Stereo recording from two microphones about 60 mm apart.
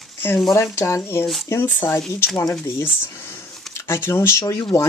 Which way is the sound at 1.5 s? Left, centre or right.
Left.